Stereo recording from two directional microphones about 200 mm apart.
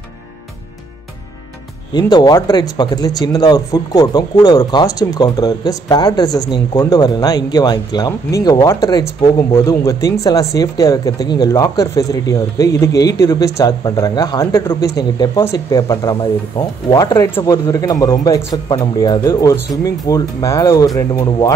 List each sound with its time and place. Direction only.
2.0 s speech: 20° left (ahead or behind)